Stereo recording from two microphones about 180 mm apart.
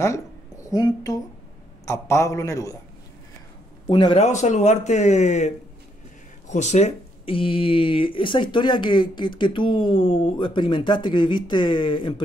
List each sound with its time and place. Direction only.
0.7 s a man's voice: 20° left (ahead or behind)
3.9 s speech: 30° left (ahead or behind)
4.3 s speech: 40° left (ahead or behind)
6.5 s speech: 40° left (ahead or behind)